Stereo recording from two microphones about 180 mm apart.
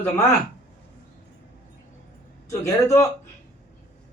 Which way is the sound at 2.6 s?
15° left (ahead or behind).